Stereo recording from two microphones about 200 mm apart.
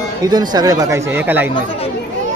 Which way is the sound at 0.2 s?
20° right (ahead or behind).